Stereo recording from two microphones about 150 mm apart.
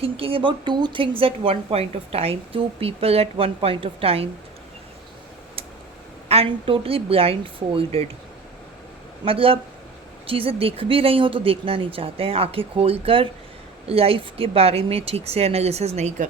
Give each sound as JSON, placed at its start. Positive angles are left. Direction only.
{"t": 0.0, "sound": "a woman's voice", "side_deg": -40}
{"t": 6.2, "sound": "a woman's voice", "side_deg": -40}
{"t": 9.2, "sound": "a woman's voice", "side_deg": -35}